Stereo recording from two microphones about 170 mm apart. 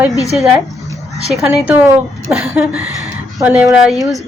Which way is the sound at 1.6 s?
10° right (ahead or behind).